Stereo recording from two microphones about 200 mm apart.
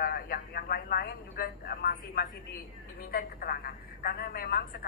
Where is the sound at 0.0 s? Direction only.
50° left (ahead or behind).